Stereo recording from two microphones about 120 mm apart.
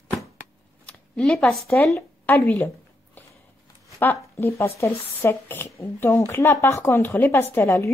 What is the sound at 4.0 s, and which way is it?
Speech, 15° left (ahead or behind).